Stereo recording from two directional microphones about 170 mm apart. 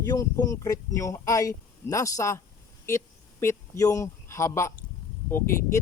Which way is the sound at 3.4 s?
20° left (ahead or behind).